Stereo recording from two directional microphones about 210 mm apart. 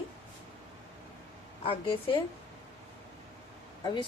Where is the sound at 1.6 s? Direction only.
25° left (ahead or behind).